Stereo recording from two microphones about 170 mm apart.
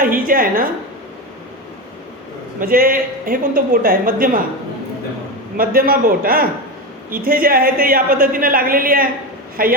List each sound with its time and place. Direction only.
0.0 s a woman's voice: 55° right (ahead or behind)
2.6 s a woman's voice: 60° right (ahead or behind)
5.5 s a woman's voice: 60° right (ahead or behind)